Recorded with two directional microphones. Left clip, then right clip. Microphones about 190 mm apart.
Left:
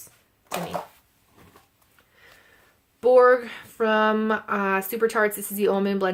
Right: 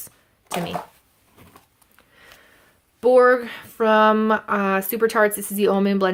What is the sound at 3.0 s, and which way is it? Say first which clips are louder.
Speech: right 1 dB; 20° right (ahead or behind).